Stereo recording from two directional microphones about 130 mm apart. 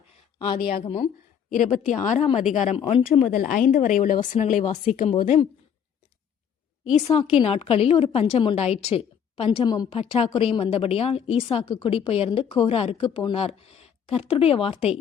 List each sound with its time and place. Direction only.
0.3 s a woman's voice: 40° left (ahead or behind)
1.5 s a woman's voice: 85° left
2.0 s a woman's voice: 55° left (ahead or behind)
2.7 s a woman's voice: 45° left (ahead or behind)
3.3 s speech: 90° left
4.3 s speech: 75° left (ahead or behind)
4.9 s a woman's voice: 55° left (ahead or behind)
7.3 s a woman's voice: 50° left (ahead or behind)
9.6 s a woman's voice: 30° left (ahead or behind)
9.9 s a woman's voice: 50° left (ahead or behind)
13.1 s a woman's voice: 35° left (ahead or behind)
13.3 s a woman's voice: 50° left (ahead or behind)